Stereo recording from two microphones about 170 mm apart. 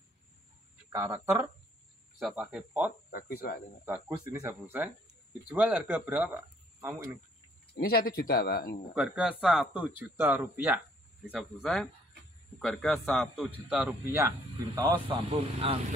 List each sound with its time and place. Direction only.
0.9 s speech: 15° right (ahead or behind)
2.2 s a man's voice: centre (ahead or behind)
3.1 s speech: 60° left (ahead or behind)
3.8 s speech: 15° right (ahead or behind)
7.7 s speech: 65° left (ahead or behind)
8.9 s speech: 5° right (ahead or behind)
11.6 s a man's voice: 5° left (ahead or behind)
14.0 s a man's voice: 15° right (ahead or behind)
15.3 s speech: 35° right (ahead or behind)